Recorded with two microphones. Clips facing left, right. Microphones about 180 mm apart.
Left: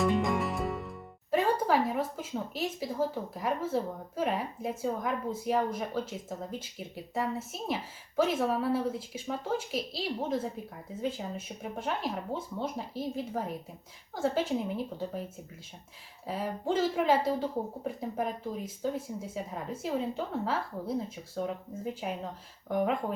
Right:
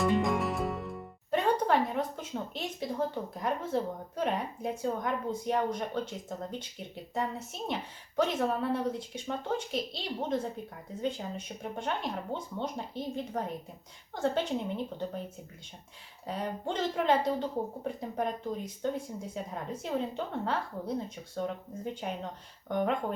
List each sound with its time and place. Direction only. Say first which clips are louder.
0.0 s speech: even; centre (ahead or behind)
16.2 s speech: left 2 dB; 5° left (ahead or behind)